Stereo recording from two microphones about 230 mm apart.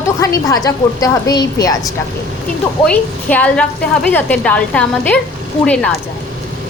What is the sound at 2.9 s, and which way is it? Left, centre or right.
A woman's voice, centre.